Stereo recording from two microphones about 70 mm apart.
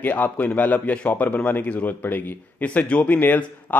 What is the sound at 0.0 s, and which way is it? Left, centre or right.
A man's voice, left.